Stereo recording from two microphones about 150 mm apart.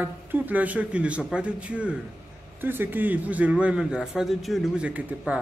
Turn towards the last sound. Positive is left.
turn(degrees=-10)  # may be behind; listen again after turning